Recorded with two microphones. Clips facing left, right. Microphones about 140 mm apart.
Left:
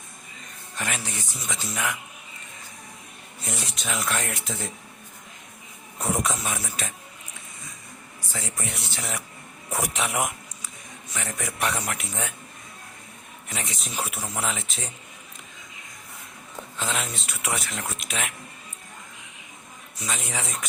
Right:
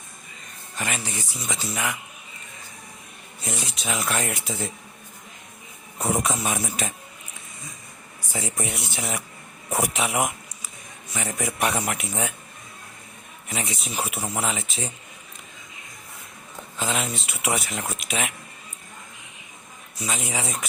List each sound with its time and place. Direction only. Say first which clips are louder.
0.8 s speech: right 2 dB; centre (ahead or behind)
3.4 s speech: right 2 dB; centre (ahead or behind)
6.0 s speech: right 2 dB; 5° right (ahead or behind)
6.4 s speech: right 4 dB; 20° right (ahead or behind)
8.3 s speech: right 4 dB; 15° right (ahead or behind)
13.5 s speech: right 4 dB; 5° right (ahead or behind)
16.7 s speech: right 3 dB; 5° right (ahead or behind)
20.0 s speech: right 3 dB; 5° right (ahead or behind)